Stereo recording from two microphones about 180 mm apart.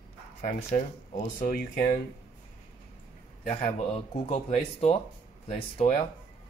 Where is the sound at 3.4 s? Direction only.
35° left (ahead or behind).